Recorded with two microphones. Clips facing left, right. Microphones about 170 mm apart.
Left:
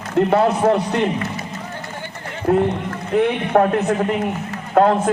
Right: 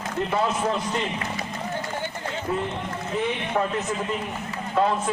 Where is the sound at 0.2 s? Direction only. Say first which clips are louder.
Left 9 dB; 65° left (ahead or behind).